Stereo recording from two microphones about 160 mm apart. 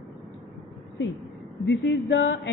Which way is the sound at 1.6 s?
90° left.